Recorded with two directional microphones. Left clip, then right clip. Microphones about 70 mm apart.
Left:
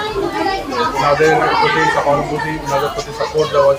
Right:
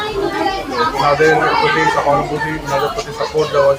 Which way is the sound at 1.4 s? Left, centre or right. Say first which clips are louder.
Even; left.